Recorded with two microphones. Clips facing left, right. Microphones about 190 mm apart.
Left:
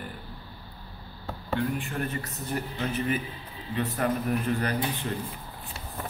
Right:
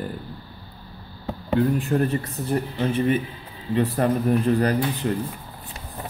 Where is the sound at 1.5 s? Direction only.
35° right (ahead or behind).